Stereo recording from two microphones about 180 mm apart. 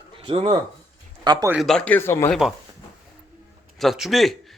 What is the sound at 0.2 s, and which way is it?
A man's voice, 30° right (ahead or behind).